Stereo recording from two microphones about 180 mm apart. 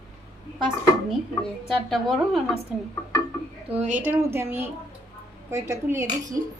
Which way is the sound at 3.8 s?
45° right (ahead or behind).